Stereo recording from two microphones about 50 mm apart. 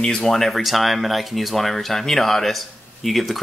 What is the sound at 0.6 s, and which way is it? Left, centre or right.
Speech, centre.